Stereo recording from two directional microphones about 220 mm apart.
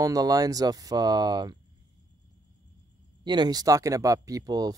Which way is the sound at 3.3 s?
20° right (ahead or behind).